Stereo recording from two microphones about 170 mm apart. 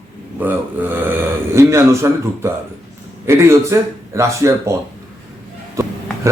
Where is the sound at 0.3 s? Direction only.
10° right (ahead or behind).